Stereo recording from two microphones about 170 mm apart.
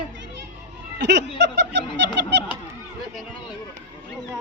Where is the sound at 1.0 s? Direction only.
90° right.